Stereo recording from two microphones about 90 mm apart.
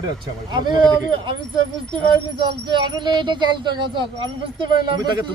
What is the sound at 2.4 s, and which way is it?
Speech, 60° right (ahead or behind).